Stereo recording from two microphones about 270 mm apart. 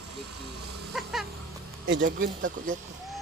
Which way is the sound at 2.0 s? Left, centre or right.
Right.